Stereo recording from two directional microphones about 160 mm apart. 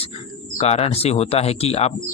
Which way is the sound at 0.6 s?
40° left (ahead or behind).